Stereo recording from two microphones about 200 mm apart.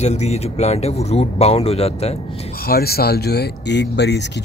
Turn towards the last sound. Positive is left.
turn(degrees=60)  # may be behind; listen again after turning